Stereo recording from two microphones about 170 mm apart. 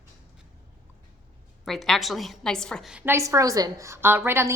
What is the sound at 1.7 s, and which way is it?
A woman's voice, centre (ahead or behind).